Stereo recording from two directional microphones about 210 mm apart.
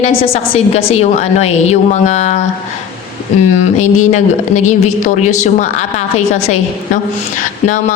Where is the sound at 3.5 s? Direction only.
35° left (ahead or behind).